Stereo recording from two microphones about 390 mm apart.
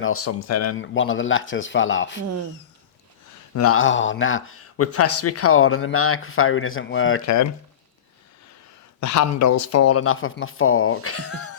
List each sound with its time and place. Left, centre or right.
0.0 s a man's voice: left
0.8 s speech: left
3.5 s a man's voice: left
9.0 s a man's voice: left